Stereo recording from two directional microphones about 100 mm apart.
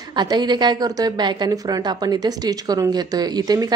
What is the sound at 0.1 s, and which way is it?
A woman's voice, 45° right (ahead or behind).